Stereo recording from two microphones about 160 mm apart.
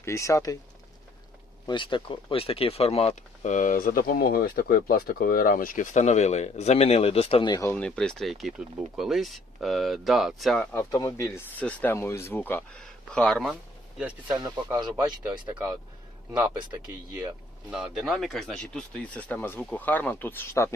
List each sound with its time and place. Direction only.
0.0 s speech: 20° left (ahead or behind)
1.6 s speech: 30° left (ahead or behind)
7.7 s speech: 5° left (ahead or behind)
10.9 s speech: 20° left (ahead or behind); by 13.6 s centre (ahead or behind)
14.3 s speech: 25° right (ahead or behind)
14.9 s speech: 10° right (ahead or behind)
16.9 s speech: 10° right (ahead or behind); by 20.7 s 20° left (ahead or behind)